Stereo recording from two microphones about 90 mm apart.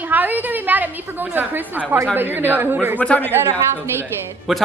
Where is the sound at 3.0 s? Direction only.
15° left (ahead or behind).